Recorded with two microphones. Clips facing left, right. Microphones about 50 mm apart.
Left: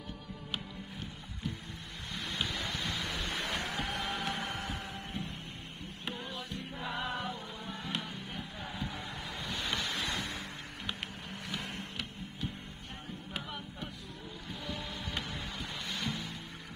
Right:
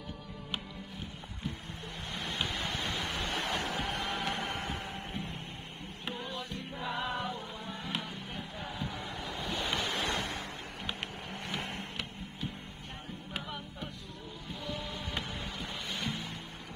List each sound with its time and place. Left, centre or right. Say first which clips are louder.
2.1 s vehicle: right 1 dB; right
3.3 s a sound: right 2 dB; right
6.0 s music: right 2 dB; centre
7.6 s music: right 1 dB; centre
9.5 s waves: right 2 dB; centre
9.8 s waves: right 2 dB; right
10.0 s a sound: right 3 dB; right
11.4 s printer: right 2 dB; right
13.3 s music: right 1 dB; centre
14.5 s printer: right 2 dB; centre
15.9 s music: even; right